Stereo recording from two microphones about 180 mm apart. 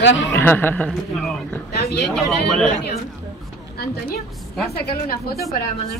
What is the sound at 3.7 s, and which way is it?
A woman's voice, 60° left (ahead or behind).